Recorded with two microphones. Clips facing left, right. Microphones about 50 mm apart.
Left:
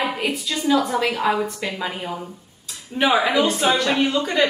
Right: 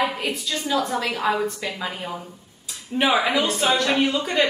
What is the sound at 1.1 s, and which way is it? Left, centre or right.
A woman's voice, centre.